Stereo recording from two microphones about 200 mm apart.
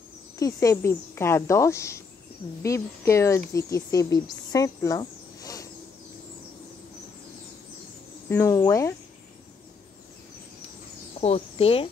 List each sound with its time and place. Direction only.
0.4 s speech: 15° left (ahead or behind)
8.3 s speech: 15° left (ahead or behind)
11.1 s speech: 30° left (ahead or behind)